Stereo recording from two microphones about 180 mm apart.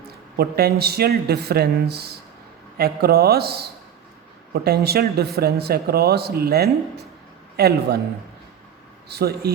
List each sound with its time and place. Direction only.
0.3 s speech: 60° right (ahead or behind)
9.0 s speech: 65° right (ahead or behind)